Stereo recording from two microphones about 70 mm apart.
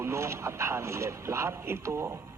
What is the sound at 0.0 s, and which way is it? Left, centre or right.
Speech, right.